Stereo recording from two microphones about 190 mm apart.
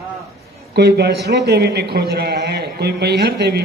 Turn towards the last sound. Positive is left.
turn(degrees=-55)  # may be behind; listen again after turning